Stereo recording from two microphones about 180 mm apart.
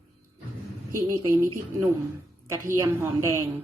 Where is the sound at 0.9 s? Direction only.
20° right (ahead or behind).